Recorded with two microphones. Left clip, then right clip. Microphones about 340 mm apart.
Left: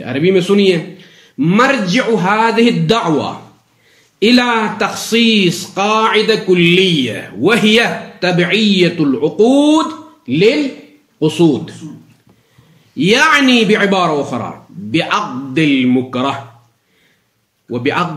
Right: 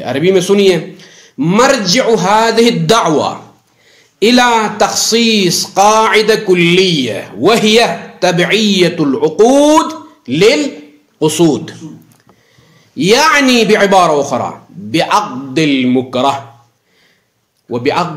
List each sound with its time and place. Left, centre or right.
0.0 s a man's voice: centre
12.9 s a man's voice: centre
17.6 s a man's voice: centre